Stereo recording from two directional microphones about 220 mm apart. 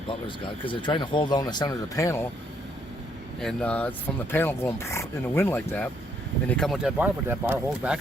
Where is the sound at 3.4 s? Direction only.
5° left (ahead or behind).